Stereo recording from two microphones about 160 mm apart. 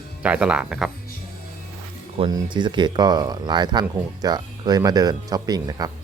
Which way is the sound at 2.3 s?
30° right (ahead or behind).